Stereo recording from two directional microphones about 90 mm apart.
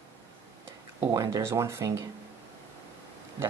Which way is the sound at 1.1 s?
35° right (ahead or behind).